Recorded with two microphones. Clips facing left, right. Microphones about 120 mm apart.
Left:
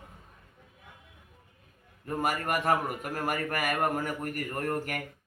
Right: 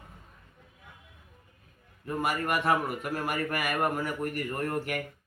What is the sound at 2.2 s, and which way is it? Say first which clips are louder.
A man's voice: even; 45° left (ahead or behind).